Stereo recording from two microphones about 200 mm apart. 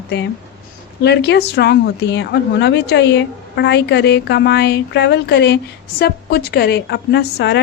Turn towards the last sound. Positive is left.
turn(degrees=60)  # may be behind; listen again after turning